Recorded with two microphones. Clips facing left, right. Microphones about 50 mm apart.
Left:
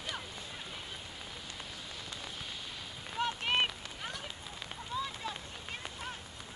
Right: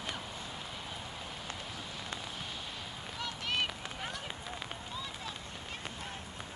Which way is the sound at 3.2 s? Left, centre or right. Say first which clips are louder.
Left 4 dB; left.